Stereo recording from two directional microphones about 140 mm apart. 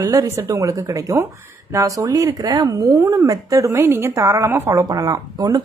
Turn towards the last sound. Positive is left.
turn(degrees=-25)  # may be behind; listen again after turning